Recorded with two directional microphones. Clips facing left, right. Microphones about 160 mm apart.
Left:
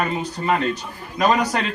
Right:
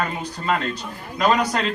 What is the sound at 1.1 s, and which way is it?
Speech, 15° left (ahead or behind).